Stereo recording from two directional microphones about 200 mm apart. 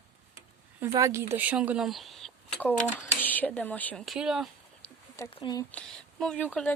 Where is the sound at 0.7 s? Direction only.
15° right (ahead or behind).